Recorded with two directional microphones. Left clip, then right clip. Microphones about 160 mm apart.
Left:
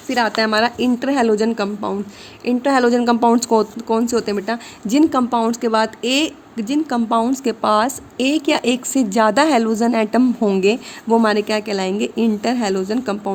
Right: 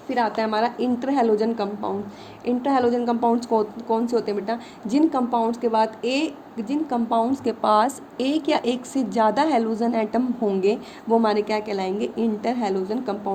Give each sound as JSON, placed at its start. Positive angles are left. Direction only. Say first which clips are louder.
{"t": 0.1, "sound": "speech", "louder": "left 5 dB", "side_deg": 55}